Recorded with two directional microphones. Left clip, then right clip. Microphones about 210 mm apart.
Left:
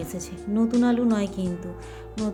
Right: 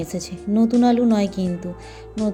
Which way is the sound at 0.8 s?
20° right (ahead or behind).